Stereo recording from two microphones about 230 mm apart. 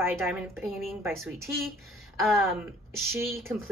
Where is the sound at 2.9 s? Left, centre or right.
Right.